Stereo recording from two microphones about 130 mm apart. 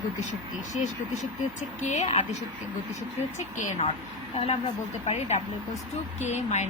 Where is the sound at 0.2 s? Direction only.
70° left (ahead or behind).